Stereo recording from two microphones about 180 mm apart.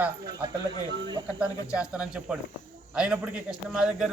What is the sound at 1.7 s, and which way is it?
Speech, 5° right (ahead or behind).